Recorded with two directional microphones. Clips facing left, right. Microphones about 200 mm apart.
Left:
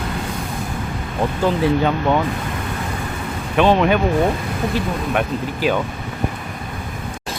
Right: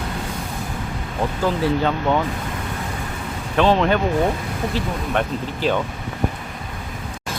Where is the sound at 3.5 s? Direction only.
15° left (ahead or behind).